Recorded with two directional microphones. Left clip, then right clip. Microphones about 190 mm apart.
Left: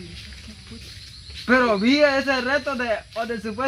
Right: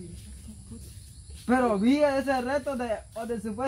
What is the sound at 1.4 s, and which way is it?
Speech, 20° right (ahead or behind).